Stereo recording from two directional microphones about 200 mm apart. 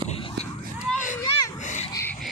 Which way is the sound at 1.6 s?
35° left (ahead or behind).